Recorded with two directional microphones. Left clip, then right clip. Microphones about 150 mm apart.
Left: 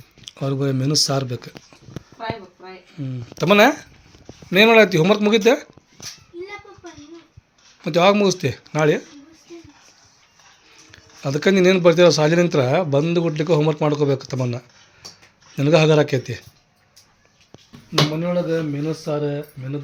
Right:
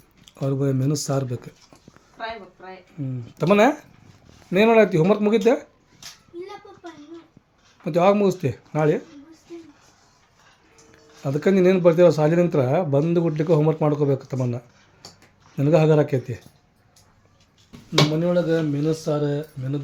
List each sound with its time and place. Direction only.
0.3 s speech: 10° right (ahead or behind)
2.9 s speech: centre (ahead or behind)
7.8 s speech: 5° right (ahead or behind)
8.7 s speech: 5° left (ahead or behind)
10.9 s a sound: centre (ahead or behind)
11.5 s speech: 5° left (ahead or behind)
17.9 s speech: 20° right (ahead or behind)